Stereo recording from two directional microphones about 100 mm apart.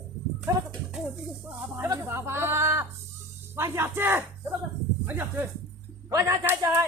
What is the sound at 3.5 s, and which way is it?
Speech, 25° right (ahead or behind).